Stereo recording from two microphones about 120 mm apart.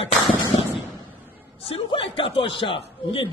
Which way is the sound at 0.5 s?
50° left (ahead or behind).